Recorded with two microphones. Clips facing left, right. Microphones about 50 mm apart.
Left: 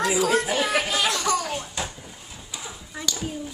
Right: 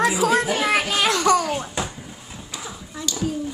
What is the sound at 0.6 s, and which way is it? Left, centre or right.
Children playing, right.